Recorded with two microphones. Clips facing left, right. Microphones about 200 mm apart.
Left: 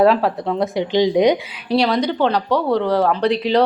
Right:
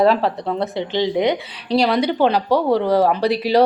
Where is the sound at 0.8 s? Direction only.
15° left (ahead or behind).